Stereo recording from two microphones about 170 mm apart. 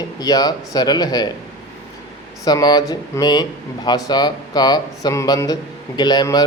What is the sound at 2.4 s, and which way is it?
Speech, 25° left (ahead or behind).